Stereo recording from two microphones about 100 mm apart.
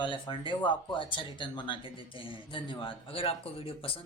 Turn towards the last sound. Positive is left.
turn(degrees=75)  # may be behind; listen again after turning